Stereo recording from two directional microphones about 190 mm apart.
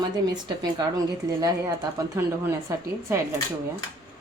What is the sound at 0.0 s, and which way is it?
Speech, 20° right (ahead or behind).